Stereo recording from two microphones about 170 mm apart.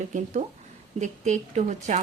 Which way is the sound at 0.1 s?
45° right (ahead or behind).